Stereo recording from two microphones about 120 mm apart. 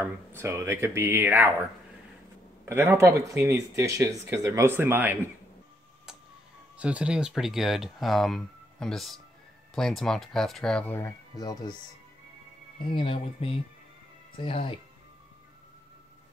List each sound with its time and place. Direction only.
0.0 s speech: 20° right (ahead or behind)
2.6 s speech: 20° right (ahead or behind)
6.8 s speech: 10° right (ahead or behind)
10.9 s speech: 20° left (ahead or behind)
11.3 s speech: 35° left (ahead or behind)
12.8 s speech: 50° left (ahead or behind)